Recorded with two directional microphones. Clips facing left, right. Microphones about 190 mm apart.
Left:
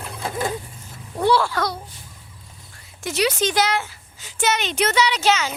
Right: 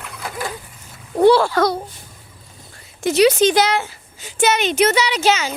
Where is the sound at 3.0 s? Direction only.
25° right (ahead or behind); by 5.4 s 5° right (ahead or behind).